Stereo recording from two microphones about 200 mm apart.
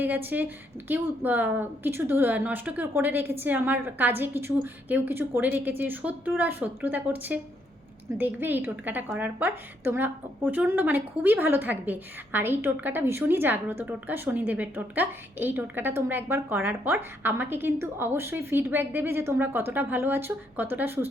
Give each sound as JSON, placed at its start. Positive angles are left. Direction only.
{"t": 0.0, "sound": "a woman's voice", "side_deg": -10}